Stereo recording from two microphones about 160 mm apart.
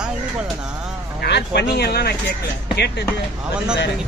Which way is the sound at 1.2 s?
90° left.